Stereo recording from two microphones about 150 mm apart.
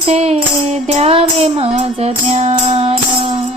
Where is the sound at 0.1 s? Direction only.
45° right (ahead or behind).